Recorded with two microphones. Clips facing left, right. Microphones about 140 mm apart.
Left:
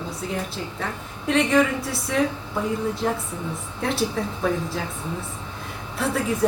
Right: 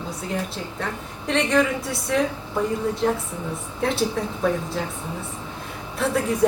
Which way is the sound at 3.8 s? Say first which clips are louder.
Right 1 dB; centre (ahead or behind).